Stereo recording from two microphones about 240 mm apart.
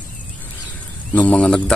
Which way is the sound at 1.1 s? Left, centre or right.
Centre.